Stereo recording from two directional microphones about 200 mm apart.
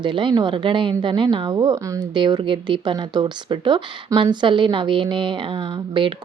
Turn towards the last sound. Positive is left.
turn(degrees=-25)  # may be behind; listen again after turning